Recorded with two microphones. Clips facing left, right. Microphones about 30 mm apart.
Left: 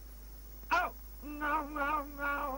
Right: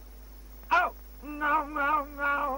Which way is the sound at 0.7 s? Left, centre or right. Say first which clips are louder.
Right 7 dB; right.